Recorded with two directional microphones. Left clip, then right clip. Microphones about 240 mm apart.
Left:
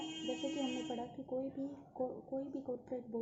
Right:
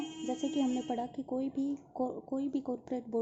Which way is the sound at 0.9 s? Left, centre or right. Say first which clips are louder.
Right 6 dB; right.